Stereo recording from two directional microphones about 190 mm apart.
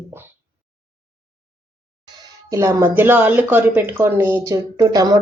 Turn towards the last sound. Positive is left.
turn(degrees=-20)  # may be behind; listen again after turning